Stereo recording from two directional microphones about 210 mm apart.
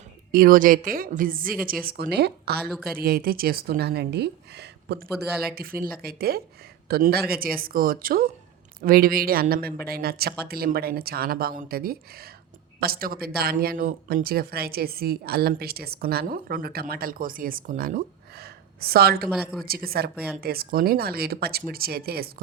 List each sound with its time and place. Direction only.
0.3 s speech: 45° right (ahead or behind)
2.6 s speech: centre (ahead or behind)
3.0 s speech: 45° right (ahead or behind)
5.2 s speech: 5° right (ahead or behind)
5.5 s speech: 45° right (ahead or behind)
19.3 s speech: centre (ahead or behind)
19.6 s speech: 45° right (ahead or behind)